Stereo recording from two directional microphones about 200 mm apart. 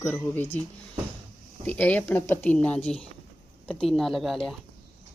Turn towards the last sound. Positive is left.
turn(degrees=0)  # may be behind; listen again after turning